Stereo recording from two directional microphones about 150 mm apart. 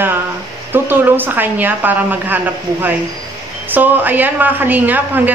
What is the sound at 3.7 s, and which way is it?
A woman's voice, 10° right (ahead or behind).